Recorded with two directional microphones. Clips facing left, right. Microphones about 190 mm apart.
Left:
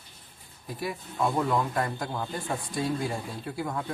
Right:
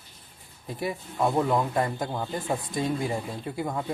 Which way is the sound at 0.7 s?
25° right (ahead or behind).